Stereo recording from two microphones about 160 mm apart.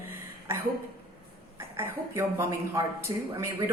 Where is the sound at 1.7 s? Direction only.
15° right (ahead or behind).